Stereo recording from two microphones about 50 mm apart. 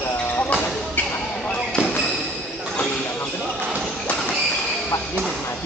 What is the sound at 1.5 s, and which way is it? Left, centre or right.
Basketball bounce, centre.